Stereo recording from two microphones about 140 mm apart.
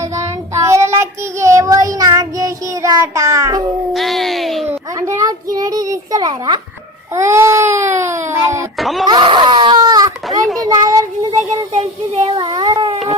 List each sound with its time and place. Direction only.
0.2 s child singing: 20° right (ahead or behind)
3.9 s speech: centre (ahead or behind)
4.7 s a sound: 20° right (ahead or behind)
5.5 s a child's voice: 25° right (ahead or behind)
8.8 s speech: centre (ahead or behind)
9.0 s speech: 35° right (ahead or behind)
10.6 s child singing: 25° right (ahead or behind)
11.7 s speech: 50° right (ahead or behind); by 12.9 s 35° right (ahead or behind)